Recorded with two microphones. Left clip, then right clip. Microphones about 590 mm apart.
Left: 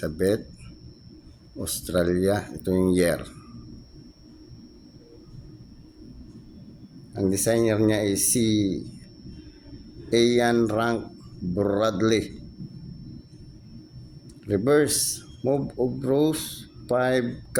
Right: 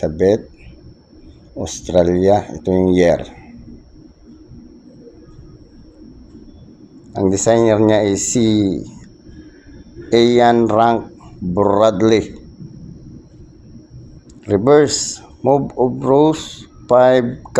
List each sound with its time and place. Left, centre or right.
0.0 s speech: left
1.6 s speech: left
7.1 s speech: left
10.1 s speech: left
14.4 s speech: left